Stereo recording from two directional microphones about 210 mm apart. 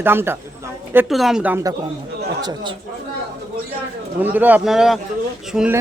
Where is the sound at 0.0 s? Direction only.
10° right (ahead or behind).